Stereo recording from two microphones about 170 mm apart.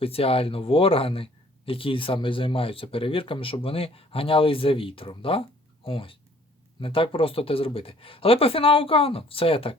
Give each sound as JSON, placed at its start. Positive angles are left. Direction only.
{"t": 0.0, "sound": "speech", "side_deg": 35}